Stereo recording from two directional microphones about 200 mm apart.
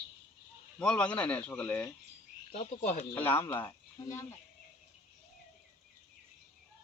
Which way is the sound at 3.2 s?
10° left (ahead or behind).